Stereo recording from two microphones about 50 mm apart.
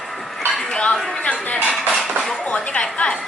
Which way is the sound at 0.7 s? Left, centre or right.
Left.